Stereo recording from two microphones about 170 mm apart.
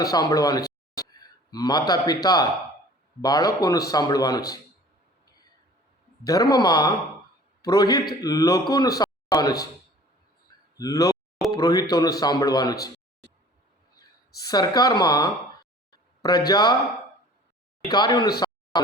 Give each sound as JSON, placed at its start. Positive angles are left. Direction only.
{"t": 0.0, "sound": "a man's voice", "side_deg": 20}
{"t": 6.2, "sound": "a man's voice", "side_deg": 20}
{"t": 10.8, "sound": "a man's voice", "side_deg": 20}
{"t": 14.4, "sound": "a man's voice", "side_deg": 25}
{"t": 16.5, "sound": "a man's voice", "side_deg": 25}
{"t": 17.9, "sound": "a man's voice", "side_deg": 25}
{"t": 18.3, "sound": "a sound", "side_deg": 25}